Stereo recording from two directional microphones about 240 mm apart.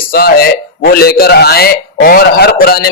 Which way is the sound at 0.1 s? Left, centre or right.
Left.